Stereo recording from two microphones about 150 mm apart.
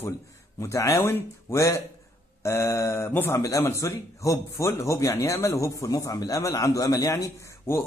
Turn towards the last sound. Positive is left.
turn(degrees=20)  # may be behind; listen again after turning